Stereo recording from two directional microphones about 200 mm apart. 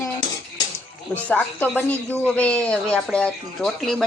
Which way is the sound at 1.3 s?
5° left (ahead or behind).